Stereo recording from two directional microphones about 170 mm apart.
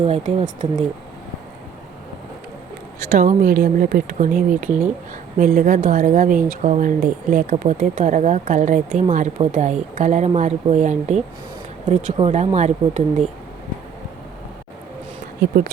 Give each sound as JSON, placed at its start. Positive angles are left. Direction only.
{"t": 0.0, "sound": "speech", "side_deg": -35}
{"t": 3.1, "sound": "speech", "side_deg": -50}